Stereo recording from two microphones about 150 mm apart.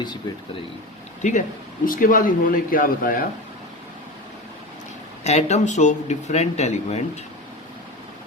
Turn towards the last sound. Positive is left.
turn(degrees=50)  # may be behind; listen again after turning